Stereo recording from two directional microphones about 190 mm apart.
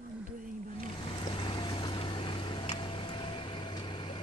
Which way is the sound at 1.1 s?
25° left (ahead or behind).